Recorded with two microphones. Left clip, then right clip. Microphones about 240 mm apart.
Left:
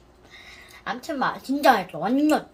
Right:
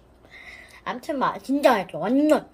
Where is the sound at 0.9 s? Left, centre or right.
Centre.